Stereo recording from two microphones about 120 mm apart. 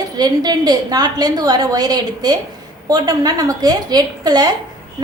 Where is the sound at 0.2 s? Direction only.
35° right (ahead or behind).